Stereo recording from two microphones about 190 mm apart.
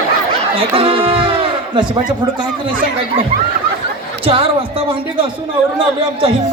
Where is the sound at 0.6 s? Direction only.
30° right (ahead or behind).